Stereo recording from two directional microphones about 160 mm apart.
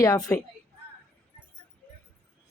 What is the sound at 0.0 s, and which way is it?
Speech, 20° left (ahead or behind).